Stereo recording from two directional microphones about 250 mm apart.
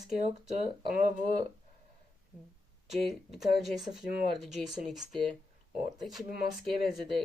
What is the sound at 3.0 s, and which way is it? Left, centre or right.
Speech, centre.